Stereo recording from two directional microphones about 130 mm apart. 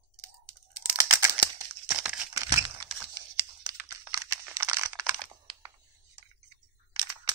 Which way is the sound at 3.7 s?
35° right (ahead or behind).